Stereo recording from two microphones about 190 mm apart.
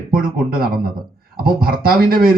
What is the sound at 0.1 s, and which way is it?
A man's voice, 50° right (ahead or behind).